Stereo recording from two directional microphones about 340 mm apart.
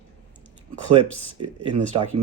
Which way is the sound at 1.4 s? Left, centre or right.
Centre.